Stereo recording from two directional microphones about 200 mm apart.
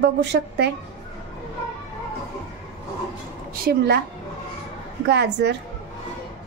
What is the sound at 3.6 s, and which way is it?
Speech, 55° right (ahead or behind).